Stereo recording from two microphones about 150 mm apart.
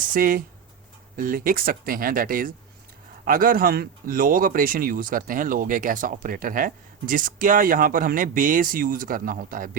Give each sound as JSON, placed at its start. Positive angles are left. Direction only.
{"t": 0.0, "sound": "speech", "side_deg": -65}